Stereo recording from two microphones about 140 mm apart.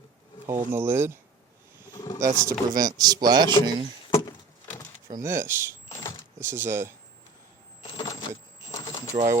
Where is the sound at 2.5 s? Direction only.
25° right (ahead or behind).